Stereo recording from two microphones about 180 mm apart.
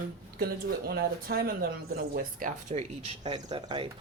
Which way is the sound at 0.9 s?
60° right (ahead or behind).